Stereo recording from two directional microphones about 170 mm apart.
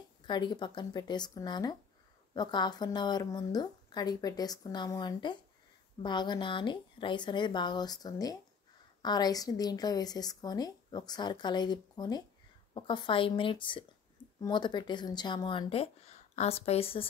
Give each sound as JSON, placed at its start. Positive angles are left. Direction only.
{"t": 0.3, "sound": "a woman's voice", "side_deg": 25}